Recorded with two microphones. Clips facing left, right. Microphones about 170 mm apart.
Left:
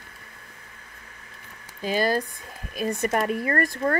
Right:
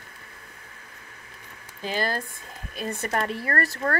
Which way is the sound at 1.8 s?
15° left (ahead or behind).